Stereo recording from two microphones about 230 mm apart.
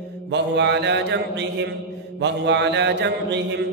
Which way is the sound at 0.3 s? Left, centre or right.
Right.